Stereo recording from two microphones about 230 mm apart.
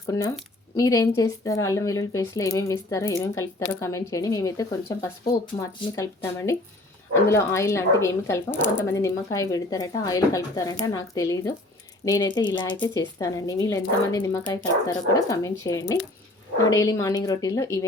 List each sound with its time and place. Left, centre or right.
0.1 s speech: centre